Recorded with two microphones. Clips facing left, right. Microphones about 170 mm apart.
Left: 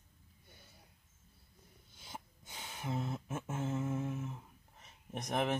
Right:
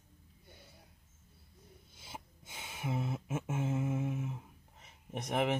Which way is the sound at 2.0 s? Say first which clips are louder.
Even; 10° right (ahead or behind).